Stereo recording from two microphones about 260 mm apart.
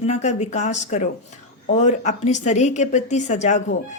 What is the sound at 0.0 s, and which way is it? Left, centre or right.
Speech, left.